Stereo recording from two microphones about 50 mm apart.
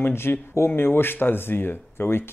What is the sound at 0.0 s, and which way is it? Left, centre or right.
Speech, left.